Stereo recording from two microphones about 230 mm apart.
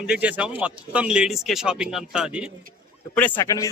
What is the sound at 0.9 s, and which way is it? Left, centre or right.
Speech, centre.